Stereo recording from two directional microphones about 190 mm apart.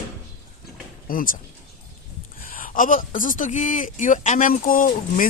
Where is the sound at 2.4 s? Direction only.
45° left (ahead or behind).